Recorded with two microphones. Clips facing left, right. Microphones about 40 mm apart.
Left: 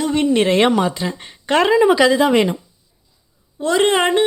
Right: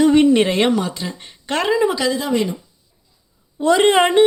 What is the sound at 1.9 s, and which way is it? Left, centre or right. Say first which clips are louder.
Speech: left 6 dB; left.